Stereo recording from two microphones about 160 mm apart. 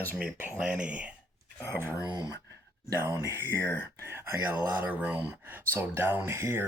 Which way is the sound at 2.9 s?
15° right (ahead or behind).